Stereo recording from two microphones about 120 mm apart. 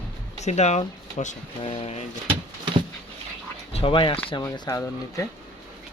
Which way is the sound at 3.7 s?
45° left (ahead or behind).